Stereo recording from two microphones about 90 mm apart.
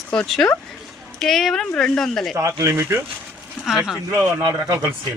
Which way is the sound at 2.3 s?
35° right (ahead or behind).